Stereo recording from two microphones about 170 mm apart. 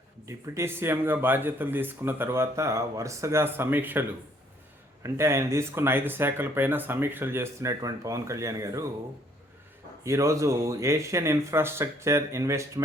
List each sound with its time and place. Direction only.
0.3 s speech: 15° right (ahead or behind)
5.0 s speech: 15° right (ahead or behind)
10.0 s speech: 15° right (ahead or behind)